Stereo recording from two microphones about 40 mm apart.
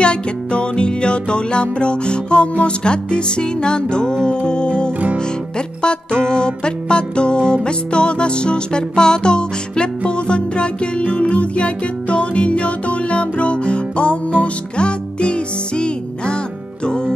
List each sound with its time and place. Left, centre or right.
0.0 s music: left
6.2 s music: centre